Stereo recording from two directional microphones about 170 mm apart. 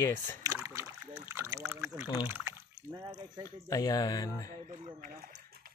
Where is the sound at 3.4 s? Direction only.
20° left (ahead or behind).